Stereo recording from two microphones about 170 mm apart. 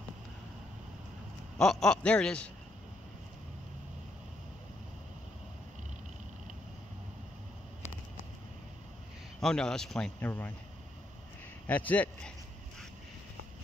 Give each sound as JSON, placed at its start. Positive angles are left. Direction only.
{"t": 1.6, "sound": "speech", "side_deg": 5}
{"t": 9.4, "sound": "speech", "side_deg": 5}
{"t": 11.6, "sound": "speech", "side_deg": 10}